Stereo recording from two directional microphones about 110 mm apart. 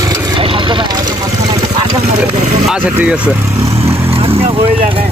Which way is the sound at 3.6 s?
25° right (ahead or behind).